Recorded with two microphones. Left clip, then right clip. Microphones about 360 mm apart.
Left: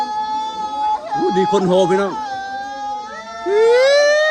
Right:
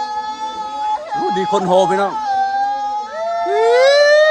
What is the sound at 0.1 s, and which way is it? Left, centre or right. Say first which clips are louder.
Music: left 2 dB; left.